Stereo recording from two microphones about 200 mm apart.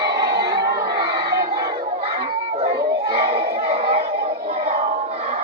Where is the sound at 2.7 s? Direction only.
55° right (ahead or behind).